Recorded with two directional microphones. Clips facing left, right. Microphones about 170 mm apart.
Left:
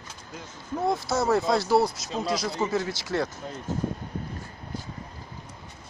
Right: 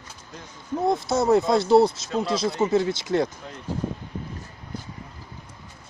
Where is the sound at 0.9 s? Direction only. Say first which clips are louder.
Right 4 dB; 20° right (ahead or behind).